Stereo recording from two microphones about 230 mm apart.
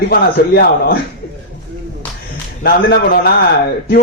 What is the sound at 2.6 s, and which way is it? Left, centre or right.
Speech, left.